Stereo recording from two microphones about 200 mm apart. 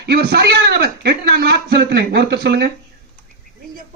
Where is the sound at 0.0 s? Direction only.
55° right (ahead or behind).